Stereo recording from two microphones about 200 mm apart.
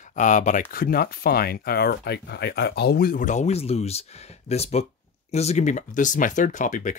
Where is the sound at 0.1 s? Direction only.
40° left (ahead or behind).